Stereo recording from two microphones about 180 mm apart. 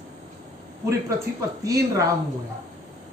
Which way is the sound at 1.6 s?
15° right (ahead or behind).